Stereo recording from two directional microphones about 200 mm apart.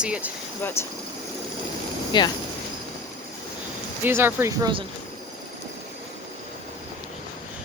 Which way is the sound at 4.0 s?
10° right (ahead or behind).